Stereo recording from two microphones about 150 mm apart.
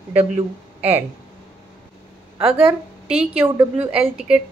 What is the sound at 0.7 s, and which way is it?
Speech, 10° right (ahead or behind).